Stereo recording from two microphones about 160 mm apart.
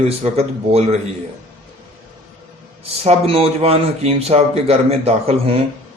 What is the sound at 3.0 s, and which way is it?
A man's voice, 40° right (ahead or behind).